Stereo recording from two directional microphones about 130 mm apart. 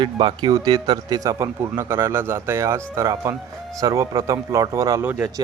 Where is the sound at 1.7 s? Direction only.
15° right (ahead or behind).